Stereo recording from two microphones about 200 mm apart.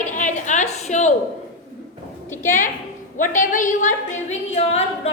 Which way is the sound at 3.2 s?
40° left (ahead or behind).